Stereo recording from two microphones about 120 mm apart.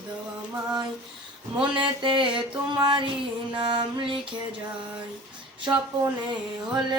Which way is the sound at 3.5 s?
40° right (ahead or behind).